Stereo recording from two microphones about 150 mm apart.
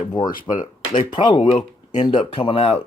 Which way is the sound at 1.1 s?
30° left (ahead or behind).